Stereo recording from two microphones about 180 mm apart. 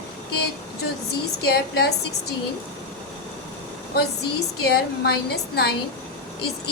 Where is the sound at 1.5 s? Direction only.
60° left (ahead or behind).